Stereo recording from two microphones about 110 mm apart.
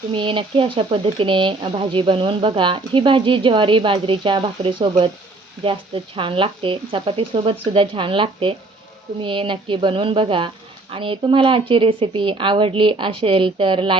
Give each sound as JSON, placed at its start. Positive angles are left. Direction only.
{"t": 0.1, "sound": "speech", "side_deg": -50}